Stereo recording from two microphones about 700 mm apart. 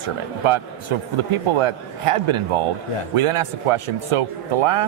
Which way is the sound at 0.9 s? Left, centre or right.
Right.